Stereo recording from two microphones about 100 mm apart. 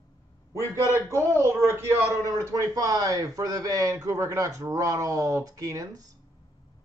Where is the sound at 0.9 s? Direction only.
30° right (ahead or behind).